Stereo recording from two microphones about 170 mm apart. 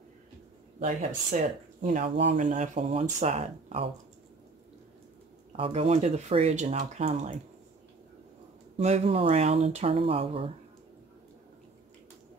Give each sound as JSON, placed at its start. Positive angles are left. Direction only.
{"t": 0.7, "sound": "speech", "side_deg": -50}
{"t": 5.6, "sound": "speech", "side_deg": -35}
{"t": 8.7, "sound": "speech", "side_deg": -40}